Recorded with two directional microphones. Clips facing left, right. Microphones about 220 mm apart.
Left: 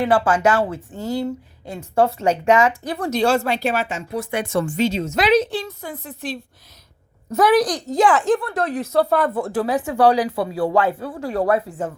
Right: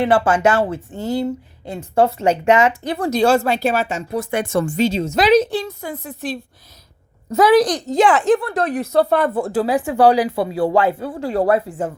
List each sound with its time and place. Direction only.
0.0 s speech: 25° right (ahead or behind)
3.2 s speech: 40° right (ahead or behind)
7.3 s speech: 90° right
7.6 s speech: 20° right (ahead or behind)